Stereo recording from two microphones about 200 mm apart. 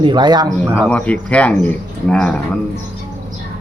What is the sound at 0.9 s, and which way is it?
Speech, 5° left (ahead or behind).